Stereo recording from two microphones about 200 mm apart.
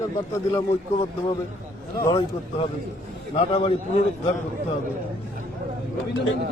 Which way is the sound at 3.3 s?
30° left (ahead or behind).